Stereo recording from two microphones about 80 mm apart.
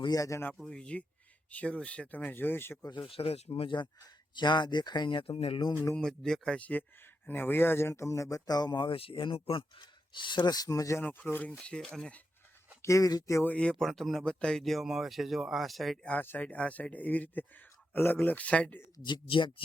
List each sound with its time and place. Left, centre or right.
0.2 s speech: left
0.7 s speech: centre
3.2 s speech: left
5.9 s speech: centre; by 11.0 s left
11.0 s speech: left
11.6 s speech: centre
12.8 s speech: left
13.4 s speech: centre
16.0 s speech: left
19.0 s speech: left